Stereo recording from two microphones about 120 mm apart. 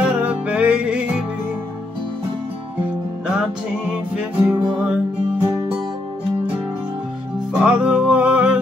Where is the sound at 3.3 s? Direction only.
10° right (ahead or behind).